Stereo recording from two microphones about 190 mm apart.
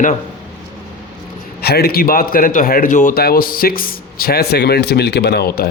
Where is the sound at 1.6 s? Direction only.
55° left (ahead or behind).